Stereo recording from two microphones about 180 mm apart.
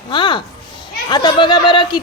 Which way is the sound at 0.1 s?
25° left (ahead or behind).